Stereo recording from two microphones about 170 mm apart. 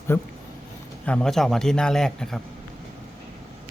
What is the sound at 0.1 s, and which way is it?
A man's voice, 15° left (ahead or behind).